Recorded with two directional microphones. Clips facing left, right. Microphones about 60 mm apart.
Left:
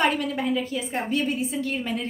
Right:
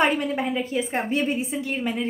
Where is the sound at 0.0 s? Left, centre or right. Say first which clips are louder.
Right 2 dB; right.